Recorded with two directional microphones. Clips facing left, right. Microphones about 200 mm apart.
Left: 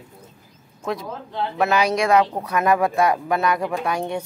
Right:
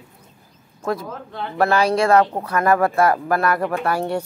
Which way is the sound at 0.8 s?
Centre (ahead or behind).